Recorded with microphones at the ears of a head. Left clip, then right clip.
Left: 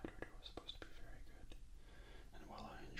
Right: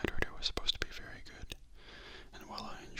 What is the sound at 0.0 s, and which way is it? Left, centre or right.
Whispering, right.